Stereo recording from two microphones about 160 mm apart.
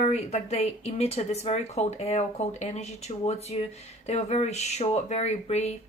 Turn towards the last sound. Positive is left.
turn(degrees=45)  # may be behind; listen again after turning